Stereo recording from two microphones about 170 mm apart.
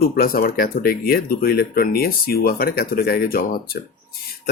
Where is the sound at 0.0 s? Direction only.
60° left (ahead or behind).